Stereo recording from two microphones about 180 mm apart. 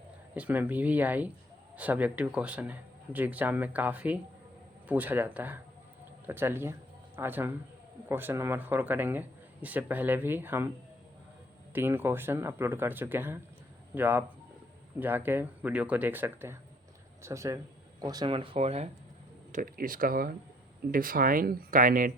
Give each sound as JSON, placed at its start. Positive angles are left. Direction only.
{"t": 0.3, "sound": "speech", "side_deg": -10}
{"t": 11.7, "sound": "speech", "side_deg": -10}
{"t": 19.5, "sound": "speech", "side_deg": -50}